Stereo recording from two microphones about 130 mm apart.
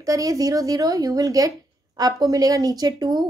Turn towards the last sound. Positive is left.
turn(degrees=-30)  # may be behind; listen again after turning